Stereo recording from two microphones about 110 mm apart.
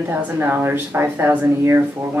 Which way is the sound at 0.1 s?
20° right (ahead or behind).